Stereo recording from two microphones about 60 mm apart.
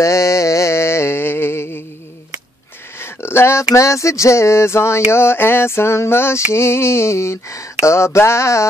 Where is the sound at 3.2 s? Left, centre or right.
Left.